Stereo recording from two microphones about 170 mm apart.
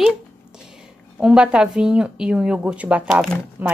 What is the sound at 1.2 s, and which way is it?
A woman's voice, 5° right (ahead or behind).